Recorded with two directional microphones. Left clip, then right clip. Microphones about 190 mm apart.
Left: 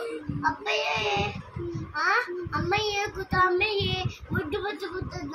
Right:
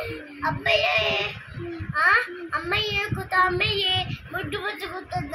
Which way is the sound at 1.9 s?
30° left (ahead or behind).